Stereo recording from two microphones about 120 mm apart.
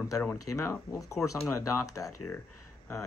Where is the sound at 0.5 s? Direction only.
25° left (ahead or behind).